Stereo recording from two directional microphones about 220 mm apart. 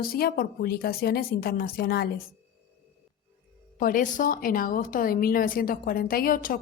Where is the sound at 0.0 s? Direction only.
45° left (ahead or behind).